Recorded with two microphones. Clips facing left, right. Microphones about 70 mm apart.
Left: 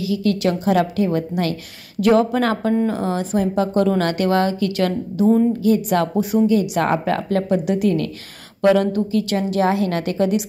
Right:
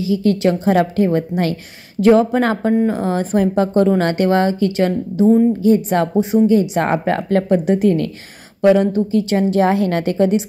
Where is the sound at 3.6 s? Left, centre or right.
Right.